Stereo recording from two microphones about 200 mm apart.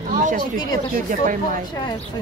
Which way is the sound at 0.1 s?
40° right (ahead or behind).